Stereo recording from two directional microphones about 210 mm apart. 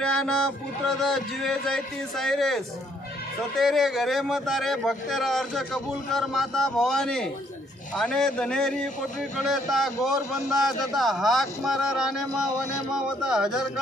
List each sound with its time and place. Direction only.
0.0 s speech: 5° left (ahead or behind)